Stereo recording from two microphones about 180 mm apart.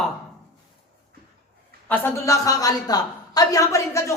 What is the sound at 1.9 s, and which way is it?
A woman's voice, 15° left (ahead or behind).